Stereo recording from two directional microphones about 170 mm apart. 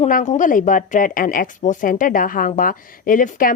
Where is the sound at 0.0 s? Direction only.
45° left (ahead or behind).